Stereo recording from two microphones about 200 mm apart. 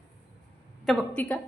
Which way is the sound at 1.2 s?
5° left (ahead or behind).